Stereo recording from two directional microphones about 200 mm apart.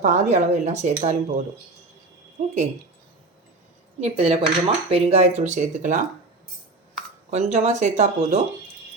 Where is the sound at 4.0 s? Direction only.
30° right (ahead or behind).